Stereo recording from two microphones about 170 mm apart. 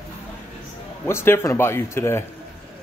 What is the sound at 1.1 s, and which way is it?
Speech, 15° left (ahead or behind).